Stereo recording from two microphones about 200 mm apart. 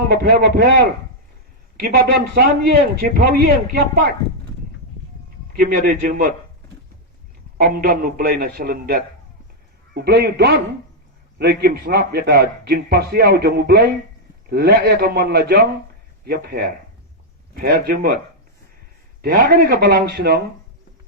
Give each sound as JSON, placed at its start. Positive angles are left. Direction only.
{"t": 0.1, "sound": "a man's voice", "side_deg": -55}
{"t": 5.7, "sound": "a man's voice", "side_deg": -50}
{"t": 7.6, "sound": "a man's voice", "side_deg": -45}
{"t": 19.2, "sound": "a man's voice", "side_deg": -45}